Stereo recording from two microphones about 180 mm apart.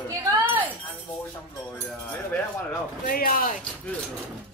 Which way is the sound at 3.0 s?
50° left (ahead or behind).